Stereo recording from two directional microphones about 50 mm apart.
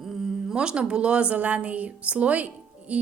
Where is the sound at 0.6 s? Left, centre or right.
Centre.